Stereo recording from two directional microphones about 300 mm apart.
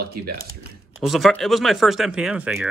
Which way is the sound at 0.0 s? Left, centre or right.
Right.